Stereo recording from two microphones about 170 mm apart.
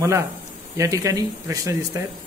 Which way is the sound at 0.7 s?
20° right (ahead or behind).